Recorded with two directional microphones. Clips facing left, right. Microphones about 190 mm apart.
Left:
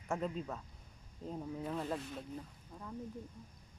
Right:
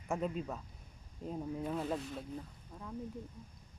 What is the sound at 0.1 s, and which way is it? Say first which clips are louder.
Speech: right 1 dB; 10° right (ahead or behind).